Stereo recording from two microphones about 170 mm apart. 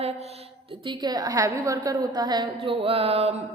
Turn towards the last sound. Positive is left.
turn(degrees=-35)  # may be behind; listen again after turning